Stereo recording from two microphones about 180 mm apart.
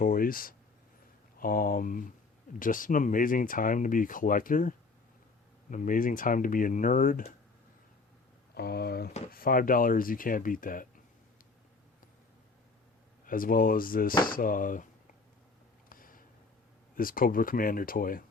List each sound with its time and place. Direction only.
0.0 s speech: 50° left (ahead or behind)
5.7 s speech: 45° left (ahead or behind)
8.5 s speech: 60° left (ahead or behind)
13.2 s speech: 50° left (ahead or behind)
15.9 s a sound: 50° left (ahead or behind)
16.9 s speech: 50° left (ahead or behind)